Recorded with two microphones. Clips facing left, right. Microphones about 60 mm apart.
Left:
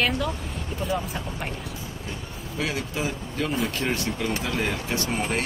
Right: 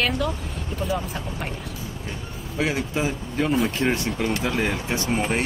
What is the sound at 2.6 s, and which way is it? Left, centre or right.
A man's voice, right.